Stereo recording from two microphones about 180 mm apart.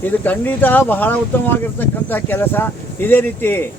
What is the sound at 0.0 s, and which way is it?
Speech, 10° left (ahead or behind).